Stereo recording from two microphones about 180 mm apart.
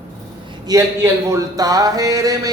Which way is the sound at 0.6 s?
20° right (ahead or behind).